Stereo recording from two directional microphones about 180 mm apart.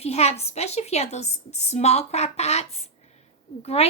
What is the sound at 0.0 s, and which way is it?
A woman's voice, 35° left (ahead or behind).